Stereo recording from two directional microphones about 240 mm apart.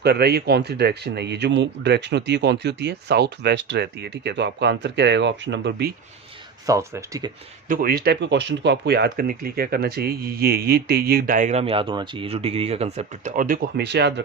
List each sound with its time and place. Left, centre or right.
0.0 s speech: right
6.7 s speech: centre
7.7 s speech: right